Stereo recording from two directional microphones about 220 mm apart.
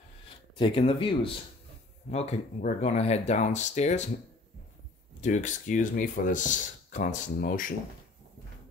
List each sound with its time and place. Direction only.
0.6 s speech: 25° left (ahead or behind)
5.2 s speech: 35° left (ahead or behind)